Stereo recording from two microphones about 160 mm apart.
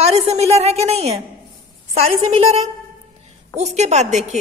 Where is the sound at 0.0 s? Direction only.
40° right (ahead or behind).